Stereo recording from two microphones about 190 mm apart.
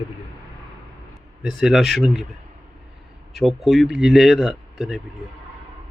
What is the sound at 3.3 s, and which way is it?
Speech, centre (ahead or behind).